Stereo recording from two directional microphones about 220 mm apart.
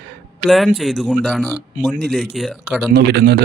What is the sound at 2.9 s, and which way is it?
Speech, 45° right (ahead or behind).